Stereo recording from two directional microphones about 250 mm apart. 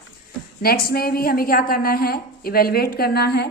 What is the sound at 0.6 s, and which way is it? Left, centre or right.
A woman's voice, left.